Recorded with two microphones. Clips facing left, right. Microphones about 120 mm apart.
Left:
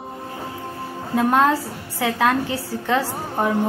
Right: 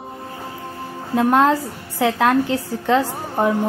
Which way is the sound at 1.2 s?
Centre (ahead or behind).